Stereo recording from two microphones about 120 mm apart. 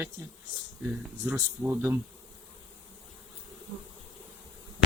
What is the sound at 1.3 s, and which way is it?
Speech, 20° right (ahead or behind).